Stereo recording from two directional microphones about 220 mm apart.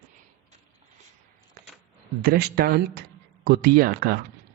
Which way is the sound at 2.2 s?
45° right (ahead or behind).